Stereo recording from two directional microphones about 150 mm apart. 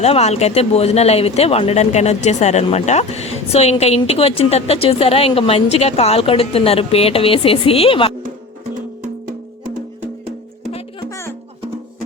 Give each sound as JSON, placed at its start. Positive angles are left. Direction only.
{"t": 0.0, "sound": "speech", "side_deg": 45}
{"t": 11.1, "sound": "music", "side_deg": 15}